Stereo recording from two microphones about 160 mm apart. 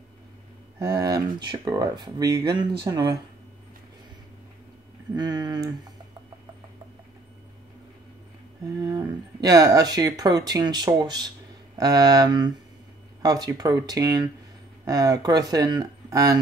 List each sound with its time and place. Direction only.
0.9 s speech: 20° right (ahead or behind)
5.1 s speech: 25° right (ahead or behind)
8.6 s speech: 20° right (ahead or behind)